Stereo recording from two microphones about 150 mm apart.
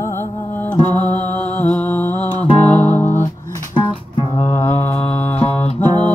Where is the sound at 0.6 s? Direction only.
10° left (ahead or behind).